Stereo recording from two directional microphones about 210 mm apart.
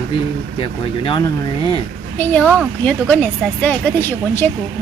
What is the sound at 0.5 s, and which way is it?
Speech, 25° left (ahead or behind).